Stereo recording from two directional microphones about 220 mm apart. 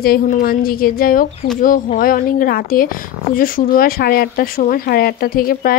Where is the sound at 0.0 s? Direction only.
45° left (ahead or behind).